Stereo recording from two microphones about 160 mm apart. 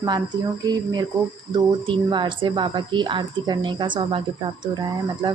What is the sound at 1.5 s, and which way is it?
Speech, 30° right (ahead or behind).